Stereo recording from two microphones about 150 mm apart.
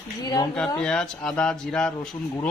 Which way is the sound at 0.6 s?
5° left (ahead or behind).